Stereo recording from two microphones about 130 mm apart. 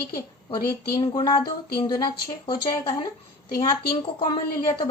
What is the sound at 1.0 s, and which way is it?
Speech, 35° left (ahead or behind).